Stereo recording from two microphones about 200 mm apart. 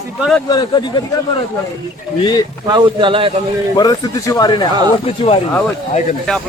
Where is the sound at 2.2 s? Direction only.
20° left (ahead or behind).